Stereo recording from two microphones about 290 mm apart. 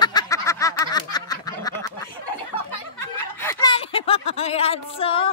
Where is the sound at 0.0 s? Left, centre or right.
Centre.